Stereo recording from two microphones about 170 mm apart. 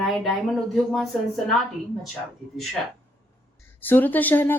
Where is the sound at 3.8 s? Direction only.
10° left (ahead or behind).